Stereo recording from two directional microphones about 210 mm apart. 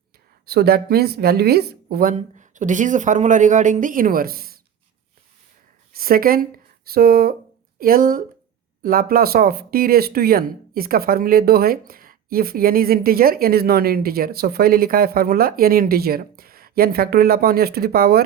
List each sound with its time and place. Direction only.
0.4 s speech: 50° right (ahead or behind)
5.9 s speech: 45° right (ahead or behind)